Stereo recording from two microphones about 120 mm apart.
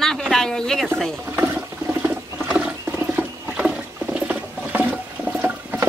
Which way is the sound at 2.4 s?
10° right (ahead or behind).